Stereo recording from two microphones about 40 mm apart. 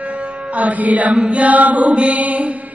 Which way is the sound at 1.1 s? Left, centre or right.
Right.